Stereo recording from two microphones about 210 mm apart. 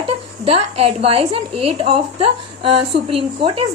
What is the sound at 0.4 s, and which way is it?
A woman's voice, 25° right (ahead or behind).